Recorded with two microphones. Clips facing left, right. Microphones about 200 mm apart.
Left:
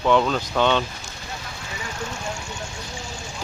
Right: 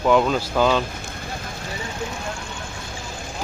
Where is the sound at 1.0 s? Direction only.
55° right (ahead or behind).